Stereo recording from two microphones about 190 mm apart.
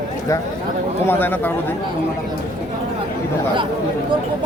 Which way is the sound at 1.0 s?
10° left (ahead or behind).